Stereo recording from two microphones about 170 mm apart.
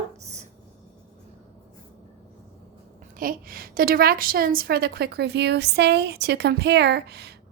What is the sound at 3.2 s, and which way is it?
A woman's voice, 55° right (ahead or behind).